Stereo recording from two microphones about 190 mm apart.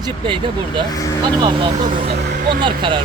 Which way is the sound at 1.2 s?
25° right (ahead or behind).